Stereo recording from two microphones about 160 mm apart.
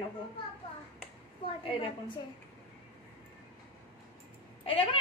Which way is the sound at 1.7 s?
35° left (ahead or behind).